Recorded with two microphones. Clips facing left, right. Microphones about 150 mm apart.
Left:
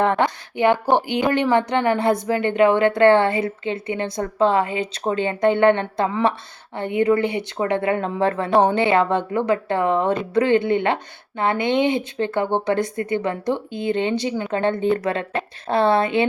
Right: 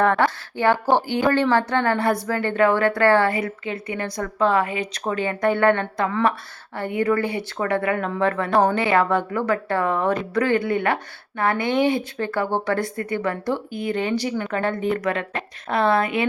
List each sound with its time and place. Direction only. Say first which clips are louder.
0.0 s a woman's voice: even; 20° left (ahead or behind)